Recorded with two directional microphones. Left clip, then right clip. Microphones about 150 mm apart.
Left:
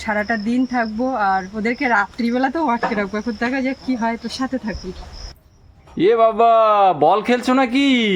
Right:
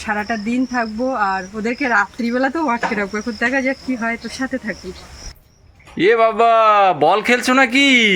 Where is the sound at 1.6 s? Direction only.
45° left (ahead or behind).